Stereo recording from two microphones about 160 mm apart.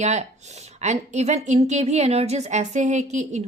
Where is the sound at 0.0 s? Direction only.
45° right (ahead or behind).